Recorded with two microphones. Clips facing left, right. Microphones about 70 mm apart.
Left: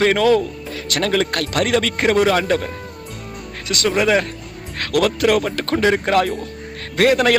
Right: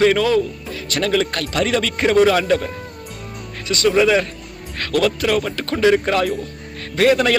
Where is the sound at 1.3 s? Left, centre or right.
Left.